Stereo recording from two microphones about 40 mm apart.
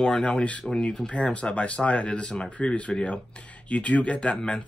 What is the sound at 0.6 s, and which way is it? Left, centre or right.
Speech, centre.